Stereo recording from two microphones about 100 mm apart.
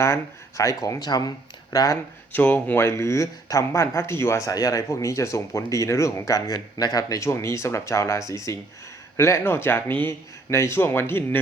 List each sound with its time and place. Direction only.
0.0 s speech: 30° left (ahead or behind)
2.3 s speech: 15° left (ahead or behind)